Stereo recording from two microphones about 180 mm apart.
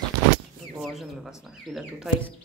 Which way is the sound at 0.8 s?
Centre (ahead or behind).